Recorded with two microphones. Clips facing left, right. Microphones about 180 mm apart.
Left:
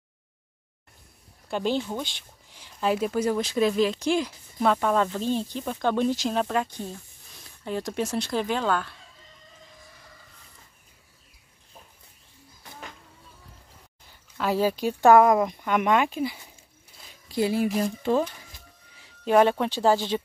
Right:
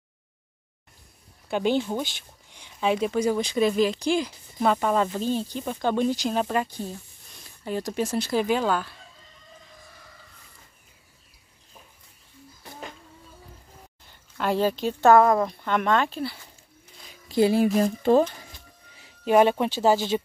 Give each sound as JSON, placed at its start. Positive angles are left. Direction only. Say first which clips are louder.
{"t": 1.5, "sound": "speech", "louder": "right 3 dB", "side_deg": 0}
{"t": 14.3, "sound": "speech", "louder": "even", "side_deg": 5}
{"t": 17.3, "sound": "speech", "louder": "right 4 dB", "side_deg": -30}
{"t": 17.8, "sound": "speech", "louder": "right 5 dB", "side_deg": -45}
{"t": 19.2, "sound": "speech", "louder": "right 1 dB", "side_deg": -5}